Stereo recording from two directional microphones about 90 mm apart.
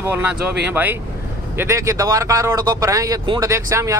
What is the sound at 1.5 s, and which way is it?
Speech, 35° right (ahead or behind).